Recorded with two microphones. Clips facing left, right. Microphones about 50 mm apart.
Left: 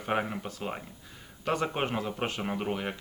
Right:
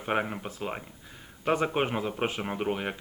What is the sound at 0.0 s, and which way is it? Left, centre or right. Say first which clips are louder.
Speech: right 1 dB; centre.